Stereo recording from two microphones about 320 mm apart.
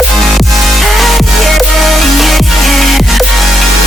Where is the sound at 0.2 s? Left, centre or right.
Centre.